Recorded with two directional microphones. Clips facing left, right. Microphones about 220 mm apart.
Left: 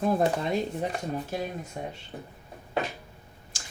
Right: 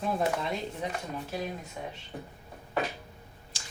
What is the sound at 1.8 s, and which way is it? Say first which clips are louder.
Speech: left 5 dB; 45° left (ahead or behind).